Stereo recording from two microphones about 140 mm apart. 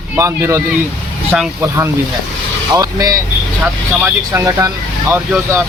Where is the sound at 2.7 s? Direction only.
25° right (ahead or behind).